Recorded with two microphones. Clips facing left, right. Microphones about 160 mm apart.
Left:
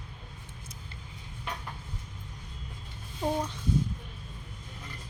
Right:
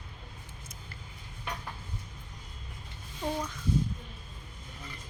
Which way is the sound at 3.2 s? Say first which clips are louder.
Left 3 dB; 25° left (ahead or behind).